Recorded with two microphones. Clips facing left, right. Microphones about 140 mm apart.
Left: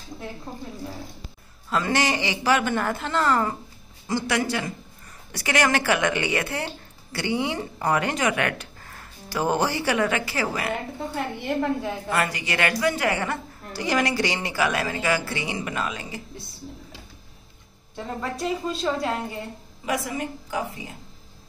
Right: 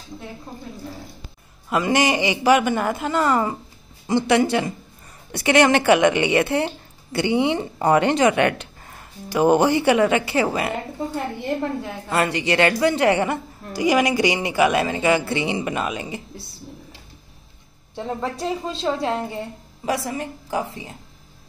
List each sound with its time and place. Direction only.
1.7 s a man's voice: 15° right (ahead or behind)
12.1 s a woman's voice: 25° right (ahead or behind)
17.9 s a woman's voice: 30° right (ahead or behind)